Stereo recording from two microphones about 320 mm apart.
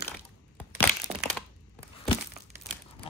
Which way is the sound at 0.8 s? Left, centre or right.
Centre.